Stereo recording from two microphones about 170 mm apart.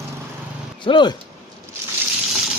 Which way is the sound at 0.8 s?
25° left (ahead or behind).